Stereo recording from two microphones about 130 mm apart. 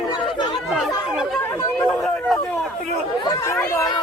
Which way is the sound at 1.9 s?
Centre (ahead or behind).